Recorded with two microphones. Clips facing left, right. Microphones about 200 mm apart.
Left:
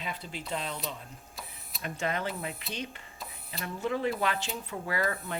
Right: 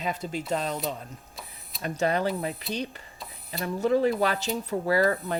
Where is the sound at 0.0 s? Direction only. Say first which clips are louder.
Right 8 dB; 45° right (ahead or behind).